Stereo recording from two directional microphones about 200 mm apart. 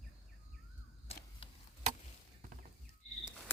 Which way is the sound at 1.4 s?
25° left (ahead or behind).